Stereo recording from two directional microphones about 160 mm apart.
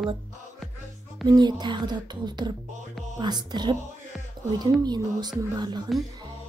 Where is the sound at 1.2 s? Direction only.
25° right (ahead or behind).